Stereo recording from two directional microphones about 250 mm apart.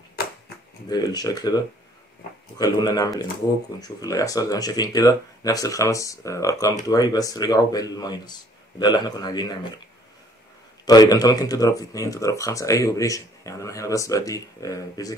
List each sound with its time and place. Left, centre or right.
0.8 s speech: centre
2.6 s speech: centre
10.9 s speech: centre